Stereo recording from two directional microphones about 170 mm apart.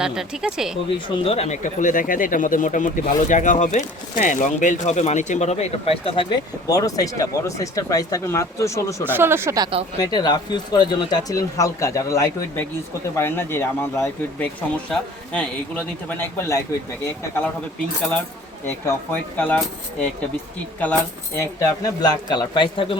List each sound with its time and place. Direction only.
0.0 s speech: 5° right (ahead or behind)
0.9 s speech: 30° left (ahead or behind)
6.7 s speech: 20° left (ahead or behind)
9.1 s speech: 15° right (ahead or behind)
10.0 s speech: 25° left (ahead or behind)
18.6 s speech: 10° left (ahead or behind)
21.3 s speech: 15° left (ahead or behind)